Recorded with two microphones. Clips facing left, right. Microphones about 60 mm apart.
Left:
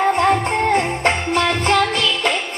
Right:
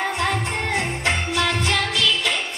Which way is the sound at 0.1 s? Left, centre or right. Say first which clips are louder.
Left 7 dB; left.